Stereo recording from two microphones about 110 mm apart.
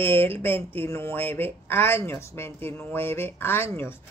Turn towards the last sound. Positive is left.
turn(degrees=20)  # may be behind; listen again after turning